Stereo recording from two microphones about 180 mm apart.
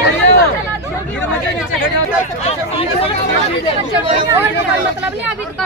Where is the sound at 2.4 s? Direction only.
35° left (ahead or behind).